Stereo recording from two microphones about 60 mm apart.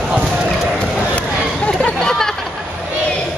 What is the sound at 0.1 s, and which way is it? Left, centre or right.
Clip-clop, centre.